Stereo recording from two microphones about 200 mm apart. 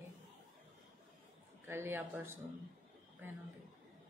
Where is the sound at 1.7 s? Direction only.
10° right (ahead or behind).